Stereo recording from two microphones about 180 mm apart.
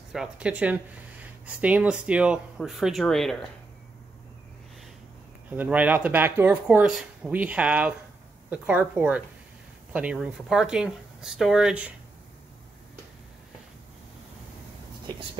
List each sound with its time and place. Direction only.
0.1 s speech: 5° right (ahead or behind)
5.6 s speech: 10° right (ahead or behind)